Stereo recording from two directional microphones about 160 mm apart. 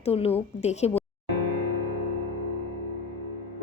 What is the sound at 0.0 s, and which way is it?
Speech, 40° left (ahead or behind).